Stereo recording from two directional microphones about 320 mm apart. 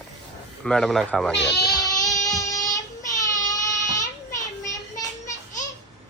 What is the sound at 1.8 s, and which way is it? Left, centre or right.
Child singing, centre.